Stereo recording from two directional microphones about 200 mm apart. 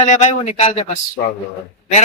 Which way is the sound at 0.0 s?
35° left (ahead or behind).